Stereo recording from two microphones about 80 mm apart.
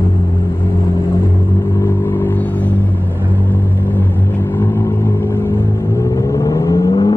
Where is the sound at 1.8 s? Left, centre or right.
Left.